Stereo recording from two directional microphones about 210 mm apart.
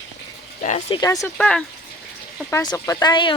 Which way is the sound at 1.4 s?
5° left (ahead or behind).